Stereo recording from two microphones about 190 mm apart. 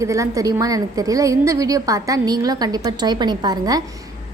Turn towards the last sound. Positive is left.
turn(degrees=-20)  # may be behind; listen again after turning